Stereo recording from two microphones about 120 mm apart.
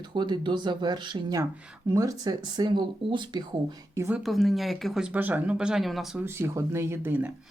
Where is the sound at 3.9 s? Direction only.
25° right (ahead or behind).